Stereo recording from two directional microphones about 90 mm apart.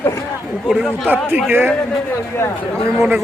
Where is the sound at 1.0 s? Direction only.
20° right (ahead or behind).